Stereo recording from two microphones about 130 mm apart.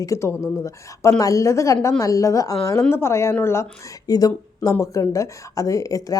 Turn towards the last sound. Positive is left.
turn(degrees=25)  # may be behind; listen again after turning